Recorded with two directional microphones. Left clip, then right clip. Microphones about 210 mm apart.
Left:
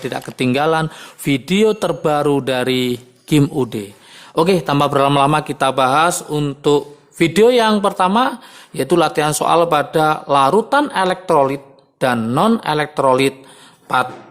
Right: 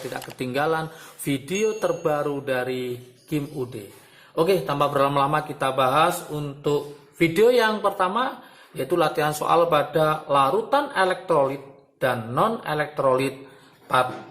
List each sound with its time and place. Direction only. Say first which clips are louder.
0.1 s speech: left 11 dB; 30° left (ahead or behind)
7.4 s speech: left 6 dB; 30° left (ahead or behind)